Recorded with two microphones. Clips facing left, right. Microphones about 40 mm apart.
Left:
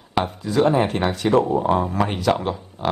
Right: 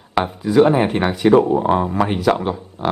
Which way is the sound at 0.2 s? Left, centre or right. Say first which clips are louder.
Right 5 dB; centre.